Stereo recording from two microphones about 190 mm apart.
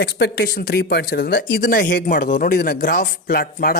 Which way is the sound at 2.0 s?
45° left (ahead or behind).